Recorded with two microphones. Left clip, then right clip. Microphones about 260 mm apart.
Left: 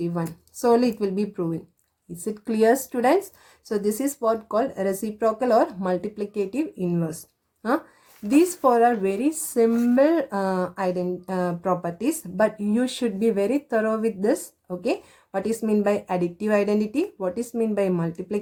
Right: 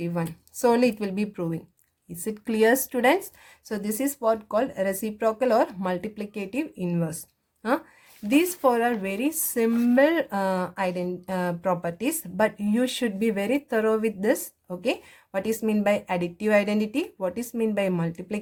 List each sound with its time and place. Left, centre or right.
0.0 s speech: right
8.4 s speech: right